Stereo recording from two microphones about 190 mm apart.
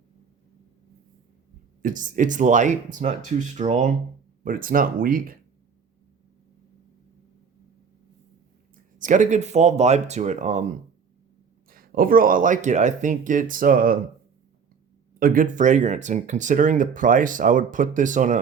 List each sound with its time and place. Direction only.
1.8 s speech: 45° right (ahead or behind)
9.0 s speech: 40° right (ahead or behind)
11.7 s speech: 50° right (ahead or behind)
15.2 s speech: 45° right (ahead or behind)